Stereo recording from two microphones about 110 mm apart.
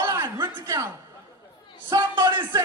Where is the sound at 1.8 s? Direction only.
40° right (ahead or behind).